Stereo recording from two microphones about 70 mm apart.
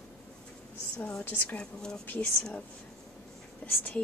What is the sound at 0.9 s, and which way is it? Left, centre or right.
Speech, centre.